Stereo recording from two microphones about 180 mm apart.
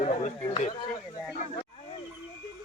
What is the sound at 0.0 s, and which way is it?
Speech, 40° left (ahead or behind).